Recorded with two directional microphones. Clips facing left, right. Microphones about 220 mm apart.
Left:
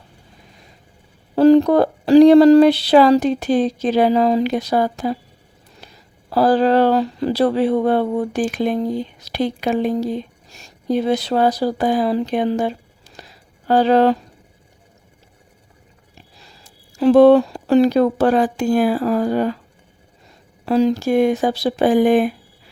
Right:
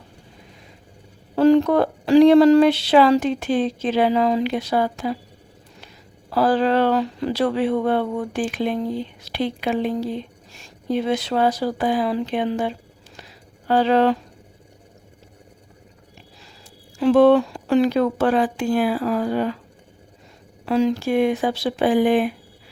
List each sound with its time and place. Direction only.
1.4 s speech: 35° left (ahead or behind)
6.3 s speech: 40° left (ahead or behind)
17.0 s speech: 35° left (ahead or behind)
20.7 s speech: 40° left (ahead or behind)